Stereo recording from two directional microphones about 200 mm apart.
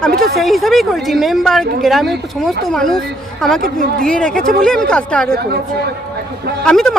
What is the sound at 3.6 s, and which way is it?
Speech, 45° right (ahead or behind).